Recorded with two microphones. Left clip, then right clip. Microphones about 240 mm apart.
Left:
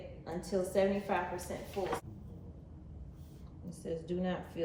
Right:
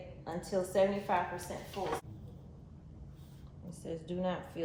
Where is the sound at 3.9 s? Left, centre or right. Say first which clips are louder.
Even; centre.